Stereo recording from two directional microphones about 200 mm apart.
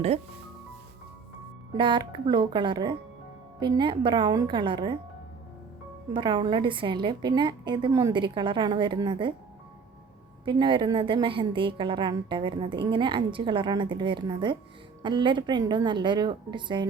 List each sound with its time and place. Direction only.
1.7 s a woman's voice: 20° right (ahead or behind)
6.1 s a woman's voice: 25° right (ahead or behind)
10.4 s a woman's voice: 20° right (ahead or behind)